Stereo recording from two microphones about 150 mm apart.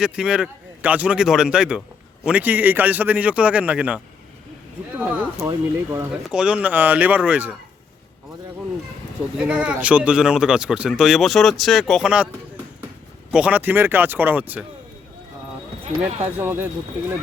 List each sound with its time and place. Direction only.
0.0 s speech: 5° right (ahead or behind)
5.4 s speech: 20° right (ahead or behind)
6.3 s speech: 5° right (ahead or behind)
9.5 s speech: 5° right (ahead or behind)
13.3 s speech: 10° right (ahead or behind)
16.0 s speech: 10° right (ahead or behind)